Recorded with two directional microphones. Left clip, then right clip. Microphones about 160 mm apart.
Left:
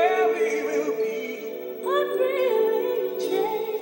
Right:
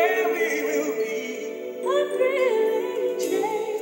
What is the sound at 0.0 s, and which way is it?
A capella, 10° right (ahead or behind).